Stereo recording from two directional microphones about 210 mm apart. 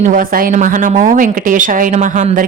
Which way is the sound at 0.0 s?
40° right (ahead or behind).